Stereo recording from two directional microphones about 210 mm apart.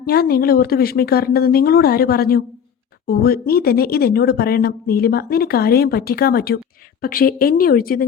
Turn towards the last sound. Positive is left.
turn(degrees=45)  # may be behind; listen again after turning